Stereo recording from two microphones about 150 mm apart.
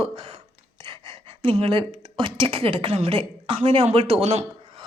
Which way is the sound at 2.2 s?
35° right (ahead or behind).